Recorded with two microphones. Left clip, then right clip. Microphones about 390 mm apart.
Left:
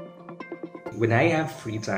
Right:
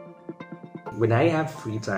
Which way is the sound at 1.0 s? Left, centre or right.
Right.